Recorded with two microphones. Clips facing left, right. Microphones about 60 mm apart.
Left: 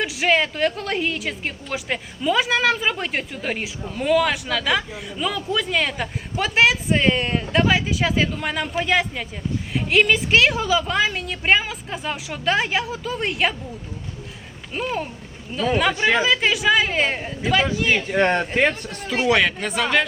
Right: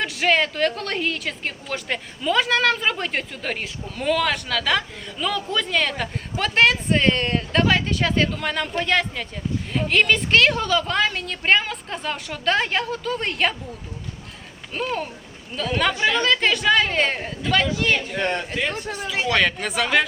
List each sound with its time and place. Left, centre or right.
0.0 s a woman's voice: centre
14.7 s a woman's voice: centre
18.1 s speech: left
19.4 s a woman's voice: centre